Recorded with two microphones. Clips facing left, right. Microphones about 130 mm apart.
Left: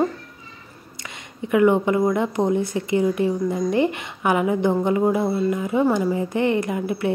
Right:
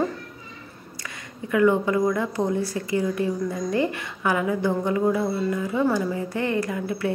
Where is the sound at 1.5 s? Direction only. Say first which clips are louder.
Left 3 dB; 20° left (ahead or behind).